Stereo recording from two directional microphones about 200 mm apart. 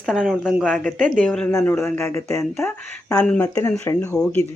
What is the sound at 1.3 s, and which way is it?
Speech, 5° left (ahead or behind).